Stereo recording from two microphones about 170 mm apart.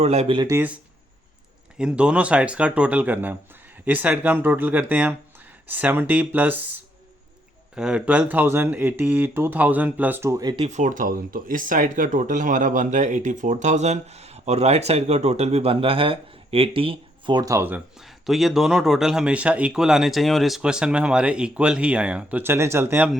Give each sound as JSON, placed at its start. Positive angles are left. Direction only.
{"t": 0.0, "sound": "speech", "side_deg": -40}
{"t": 0.5, "sound": "speech", "side_deg": -10}
{"t": 1.8, "sound": "speech", "side_deg": -5}
{"t": 7.8, "sound": "speech", "side_deg": -5}
{"t": 10.6, "sound": "speech", "side_deg": -45}